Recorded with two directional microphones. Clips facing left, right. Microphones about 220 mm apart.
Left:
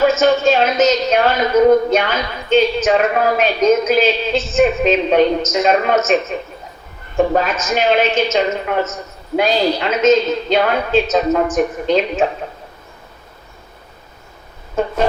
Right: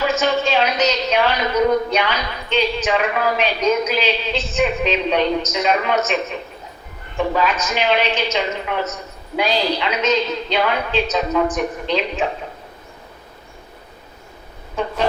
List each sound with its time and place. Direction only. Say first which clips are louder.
0.0 s a woman's voice: left 6 dB; 45° left (ahead or behind)
7.2 s a woman's voice: left 4 dB; 45° left (ahead or behind)
14.8 s a woman's voice: left 5 dB; 45° left (ahead or behind)